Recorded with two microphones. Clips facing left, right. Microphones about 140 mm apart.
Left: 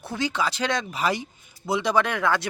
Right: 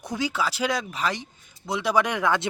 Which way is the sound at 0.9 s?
10° left (ahead or behind).